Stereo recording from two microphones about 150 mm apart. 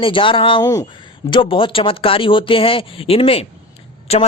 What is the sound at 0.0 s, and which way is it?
Speech, 35° left (ahead or behind).